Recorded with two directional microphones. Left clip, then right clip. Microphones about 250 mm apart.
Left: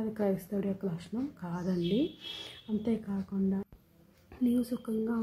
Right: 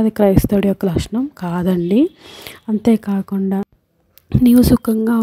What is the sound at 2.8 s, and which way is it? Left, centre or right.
Speech, right.